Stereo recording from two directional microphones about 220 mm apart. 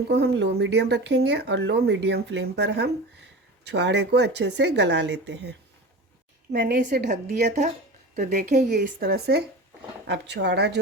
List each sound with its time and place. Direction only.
0.1 s speech: 50° right (ahead or behind)
8.1 s speech: 35° right (ahead or behind)